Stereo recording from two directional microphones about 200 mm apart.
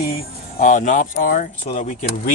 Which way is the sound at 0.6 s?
40° left (ahead or behind).